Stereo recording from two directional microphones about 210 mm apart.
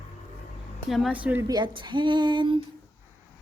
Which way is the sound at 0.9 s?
5° right (ahead or behind).